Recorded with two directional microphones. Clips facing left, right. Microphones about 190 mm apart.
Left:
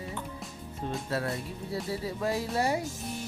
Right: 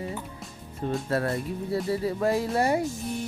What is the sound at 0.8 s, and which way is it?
Music, 60° right (ahead or behind).